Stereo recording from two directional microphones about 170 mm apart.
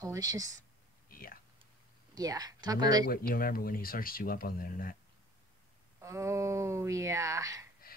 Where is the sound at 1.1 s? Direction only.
60° left (ahead or behind).